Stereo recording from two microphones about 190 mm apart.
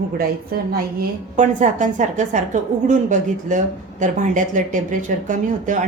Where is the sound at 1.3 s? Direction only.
40° right (ahead or behind).